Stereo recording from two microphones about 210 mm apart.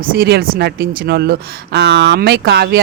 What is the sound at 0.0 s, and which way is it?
Speech, 50° right (ahead or behind).